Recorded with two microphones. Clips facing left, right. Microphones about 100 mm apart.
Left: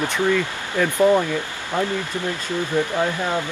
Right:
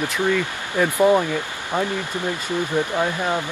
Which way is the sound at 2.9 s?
15° right (ahead or behind).